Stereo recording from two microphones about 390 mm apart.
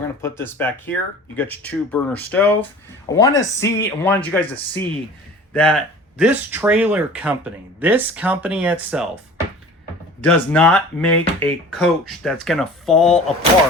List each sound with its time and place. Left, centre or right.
0.2 s speech: centre
10.2 s speech: centre